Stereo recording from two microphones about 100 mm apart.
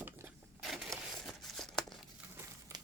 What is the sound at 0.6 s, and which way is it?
Crumpling, centre (ahead or behind).